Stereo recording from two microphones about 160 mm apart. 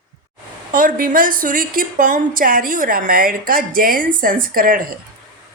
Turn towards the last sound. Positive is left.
turn(degrees=-60)  # may be behind; listen again after turning